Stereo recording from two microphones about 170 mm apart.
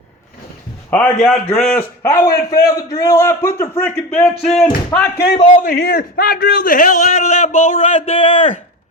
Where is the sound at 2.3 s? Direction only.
60° left (ahead or behind).